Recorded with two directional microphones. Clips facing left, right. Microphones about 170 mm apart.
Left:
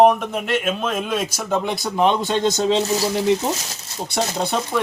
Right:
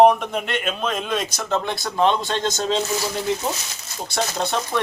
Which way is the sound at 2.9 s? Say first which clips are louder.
Left 5 dB; 30° left (ahead or behind).